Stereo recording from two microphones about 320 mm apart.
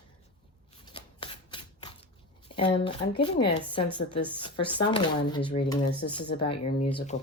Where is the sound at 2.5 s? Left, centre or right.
Centre.